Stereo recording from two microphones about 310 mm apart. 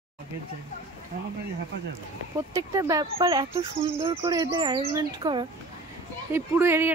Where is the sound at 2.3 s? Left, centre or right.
Centre.